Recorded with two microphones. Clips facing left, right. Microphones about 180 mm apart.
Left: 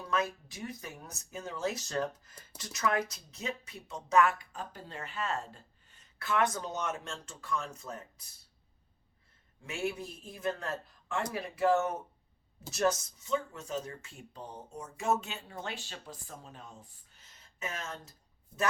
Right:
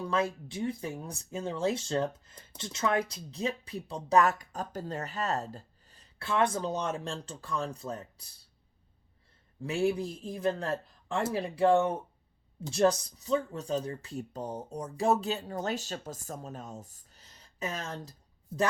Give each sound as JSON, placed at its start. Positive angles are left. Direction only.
{"t": 0.1, "sound": "speech", "side_deg": -30}
{"t": 9.6, "sound": "speech", "side_deg": -35}